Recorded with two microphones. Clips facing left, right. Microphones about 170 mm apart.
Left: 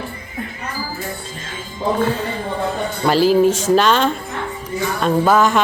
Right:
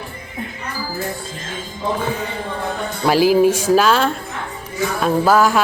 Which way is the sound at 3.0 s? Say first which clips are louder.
Even; 10° right (ahead or behind).